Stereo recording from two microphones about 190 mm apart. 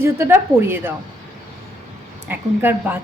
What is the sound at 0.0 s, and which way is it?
Speech, 10° right (ahead or behind).